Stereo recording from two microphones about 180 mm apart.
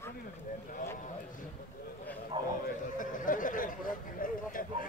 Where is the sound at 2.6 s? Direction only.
45° left (ahead or behind).